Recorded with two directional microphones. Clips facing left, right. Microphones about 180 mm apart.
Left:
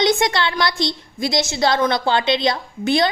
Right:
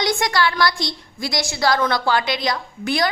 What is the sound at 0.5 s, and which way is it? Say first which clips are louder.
A woman's voice: left 1 dB; 20° left (ahead or behind).